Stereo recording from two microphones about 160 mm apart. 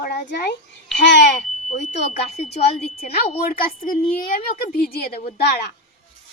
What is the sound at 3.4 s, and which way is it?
A woman's voice, 65° left (ahead or behind).